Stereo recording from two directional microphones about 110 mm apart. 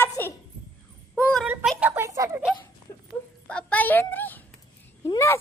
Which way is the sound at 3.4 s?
10° left (ahead or behind).